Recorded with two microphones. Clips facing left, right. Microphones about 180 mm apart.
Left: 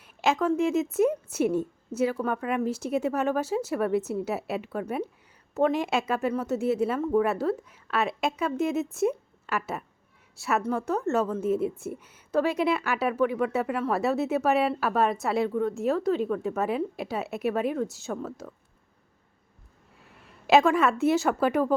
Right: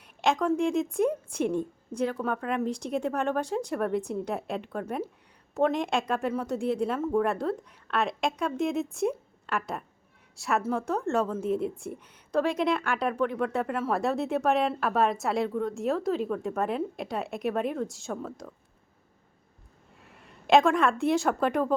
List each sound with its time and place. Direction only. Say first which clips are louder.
0.0 s a woman's voice: left 1 dB; centre (ahead or behind)
20.0 s a woman's voice: even; centre (ahead or behind)